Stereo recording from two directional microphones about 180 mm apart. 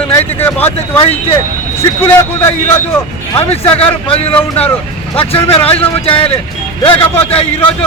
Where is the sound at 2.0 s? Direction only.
15° left (ahead or behind).